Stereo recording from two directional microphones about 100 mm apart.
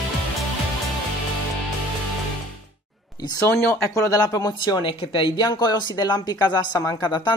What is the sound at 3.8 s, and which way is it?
Speech, 30° left (ahead or behind).